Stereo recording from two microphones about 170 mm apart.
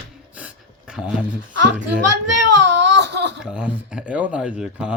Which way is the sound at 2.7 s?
90° right.